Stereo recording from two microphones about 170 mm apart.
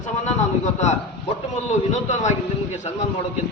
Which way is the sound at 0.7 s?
40° left (ahead or behind).